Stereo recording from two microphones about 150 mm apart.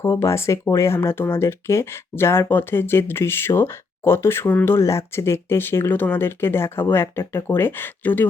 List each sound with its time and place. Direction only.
0.0 s speech: 20° left (ahead or behind)